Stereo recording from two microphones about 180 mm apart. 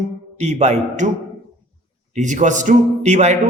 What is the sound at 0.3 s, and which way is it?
Speech, 40° right (ahead or behind).